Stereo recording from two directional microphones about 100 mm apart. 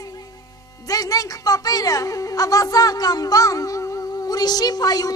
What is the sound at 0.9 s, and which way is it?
Music, 35° left (ahead or behind).